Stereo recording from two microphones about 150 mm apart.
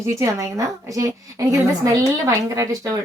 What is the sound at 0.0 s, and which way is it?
A woman's voice, 20° right (ahead or behind).